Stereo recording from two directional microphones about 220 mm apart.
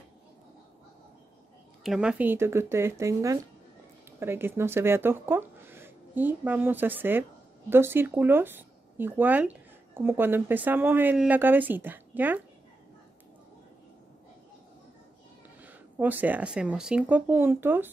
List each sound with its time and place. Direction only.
1.8 s speech: 5° right (ahead or behind)
15.6 s speech: 10° right (ahead or behind)